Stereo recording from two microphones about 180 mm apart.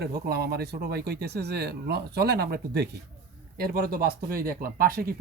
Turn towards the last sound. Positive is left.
turn(degrees=-55)  # may be behind; listen again after turning